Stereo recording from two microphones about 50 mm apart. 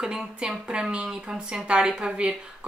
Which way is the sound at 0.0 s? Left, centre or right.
Centre.